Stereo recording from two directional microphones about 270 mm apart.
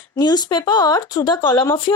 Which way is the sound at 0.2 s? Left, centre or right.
Centre.